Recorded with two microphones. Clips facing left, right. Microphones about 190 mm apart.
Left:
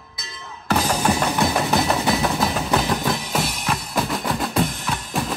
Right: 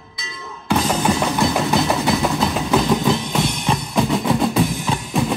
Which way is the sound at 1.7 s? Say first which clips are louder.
Right 2 dB; centre (ahead or behind).